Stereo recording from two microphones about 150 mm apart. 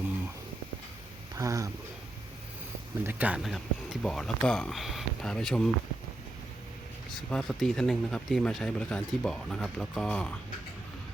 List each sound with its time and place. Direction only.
1.4 s speech: 20° right (ahead or behind)
3.0 s speech: 10° right (ahead or behind)
7.3 s speech: 5° left (ahead or behind)